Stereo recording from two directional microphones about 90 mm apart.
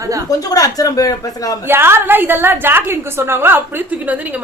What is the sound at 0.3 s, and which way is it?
Speech, 40° left (ahead or behind).